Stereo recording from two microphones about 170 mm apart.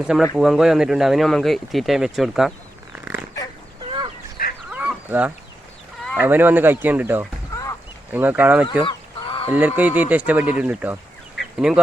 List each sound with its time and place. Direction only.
0.0 s speech: 5° right (ahead or behind)
4.4 s fowl: 60° left (ahead or behind)
4.7 s chicken: 5° right (ahead or behind)
6.1 s speech: 10° right (ahead or behind)
7.5 s a sound: 20° left (ahead or behind)
8.1 s speech: 10° right (ahead or behind)
8.8 s fowl: 30° left (ahead or behind)
9.5 s speech: 10° right (ahead or behind)